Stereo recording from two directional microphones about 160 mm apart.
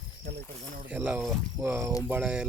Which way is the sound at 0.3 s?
85° right.